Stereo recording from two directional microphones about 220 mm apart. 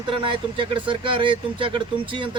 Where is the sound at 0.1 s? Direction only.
25° right (ahead or behind).